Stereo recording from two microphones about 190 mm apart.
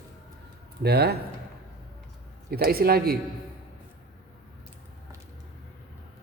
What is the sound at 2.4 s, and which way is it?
Speech, 55° right (ahead or behind).